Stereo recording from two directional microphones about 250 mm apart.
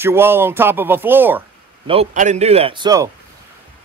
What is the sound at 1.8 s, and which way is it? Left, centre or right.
A man's voice, right.